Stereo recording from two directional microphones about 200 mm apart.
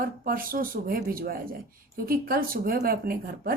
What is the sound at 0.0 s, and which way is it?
Speech, 45° right (ahead or behind).